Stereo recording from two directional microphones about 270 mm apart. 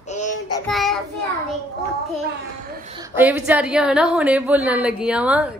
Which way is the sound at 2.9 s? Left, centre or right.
Centre.